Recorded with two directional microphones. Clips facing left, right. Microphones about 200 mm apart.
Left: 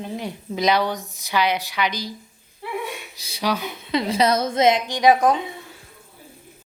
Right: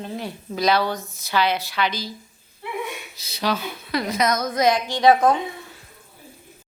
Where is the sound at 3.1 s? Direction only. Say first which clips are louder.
Even; 10° left (ahead or behind).